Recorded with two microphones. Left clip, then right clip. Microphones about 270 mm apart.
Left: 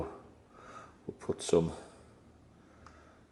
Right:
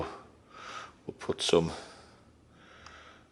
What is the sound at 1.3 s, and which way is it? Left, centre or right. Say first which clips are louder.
Speech: right 3 dB; centre.